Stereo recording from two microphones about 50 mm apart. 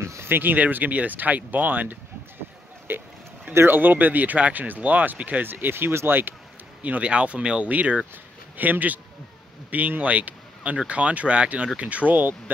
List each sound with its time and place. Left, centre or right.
0.0 s a sound: right
0.3 s speech: right
2.9 s speech: right
6.8 s speech: right